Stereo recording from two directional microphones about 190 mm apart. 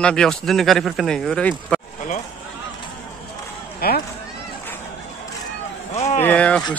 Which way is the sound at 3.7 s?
50° left (ahead or behind).